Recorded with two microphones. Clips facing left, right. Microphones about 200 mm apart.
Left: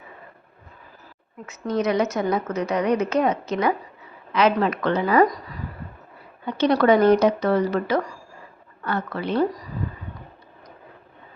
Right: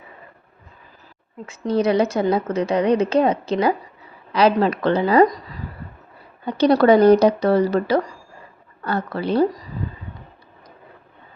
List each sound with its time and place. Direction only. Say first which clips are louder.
1.5 s a woman's voice: right 4 dB; 30° right (ahead or behind)
6.4 s speech: right 4 dB; 35° right (ahead or behind)